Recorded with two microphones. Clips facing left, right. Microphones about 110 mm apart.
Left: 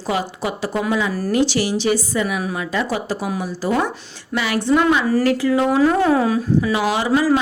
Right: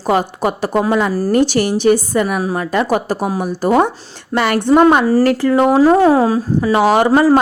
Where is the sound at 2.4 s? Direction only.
35° right (ahead or behind).